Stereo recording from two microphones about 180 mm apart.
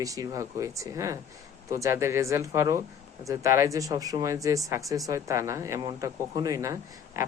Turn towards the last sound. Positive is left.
turn(degrees=-15)  # may be behind; listen again after turning